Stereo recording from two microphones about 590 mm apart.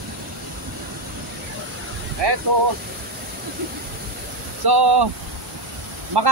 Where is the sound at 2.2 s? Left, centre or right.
Right.